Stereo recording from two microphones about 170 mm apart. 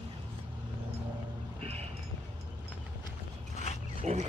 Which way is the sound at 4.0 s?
40° right (ahead or behind).